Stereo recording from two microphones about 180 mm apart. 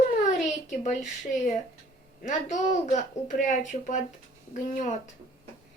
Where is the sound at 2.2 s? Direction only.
45° left (ahead or behind).